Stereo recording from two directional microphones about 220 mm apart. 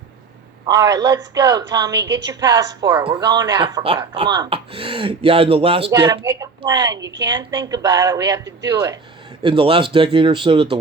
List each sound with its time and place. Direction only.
0.7 s a woman's voice: 15° right (ahead or behind)
7.0 s a woman's voice: 55° right (ahead or behind)
7.3 s a woman's voice: 15° right (ahead or behind)